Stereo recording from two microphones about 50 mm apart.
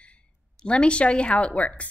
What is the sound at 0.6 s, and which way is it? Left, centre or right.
A woman's voice, left.